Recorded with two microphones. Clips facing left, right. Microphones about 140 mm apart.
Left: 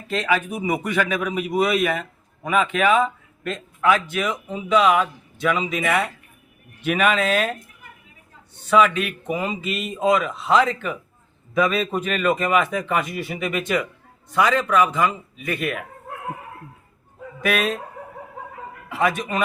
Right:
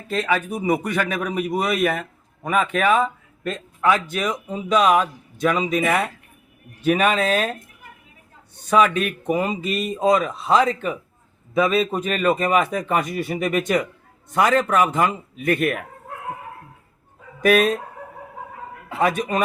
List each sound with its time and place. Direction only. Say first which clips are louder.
0.3 s a man's voice: right 1 dB; 40° right (ahead or behind)
3.4 s a sound: even; 35° right (ahead or behind)
4.1 s a man's voice: even; 40° right (ahead or behind)
8.7 s a man's voice: even; 40° right (ahead or behind)
17.4 s a man's voice: right 6 dB; 40° right (ahead or behind)
18.9 s a man's voice: right 2 dB; 35° right (ahead or behind)